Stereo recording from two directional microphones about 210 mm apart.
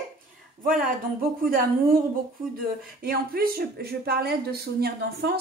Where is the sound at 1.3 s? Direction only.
40° right (ahead or behind).